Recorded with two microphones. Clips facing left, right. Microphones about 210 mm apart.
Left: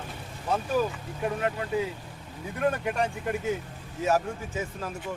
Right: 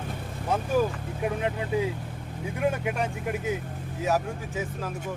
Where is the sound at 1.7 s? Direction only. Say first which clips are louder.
Right 2 dB; 15° right (ahead or behind).